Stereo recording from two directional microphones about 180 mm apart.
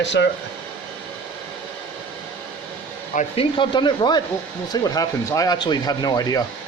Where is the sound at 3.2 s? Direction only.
30° left (ahead or behind).